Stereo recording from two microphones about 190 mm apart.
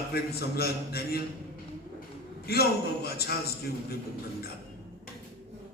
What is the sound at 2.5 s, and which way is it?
A man's voice, 55° left (ahead or behind).